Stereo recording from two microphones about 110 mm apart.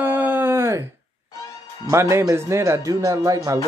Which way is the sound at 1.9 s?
25° right (ahead or behind).